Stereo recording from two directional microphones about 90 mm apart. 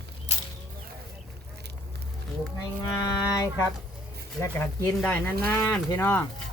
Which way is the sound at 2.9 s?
35° left (ahead or behind).